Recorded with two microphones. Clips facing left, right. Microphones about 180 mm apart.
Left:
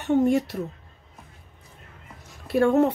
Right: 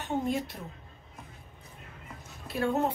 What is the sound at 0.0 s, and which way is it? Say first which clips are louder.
Speech: left 10 dB; 75° left (ahead or behind).